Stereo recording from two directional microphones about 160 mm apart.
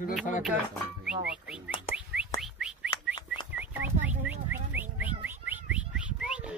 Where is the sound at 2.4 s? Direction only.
5° right (ahead or behind).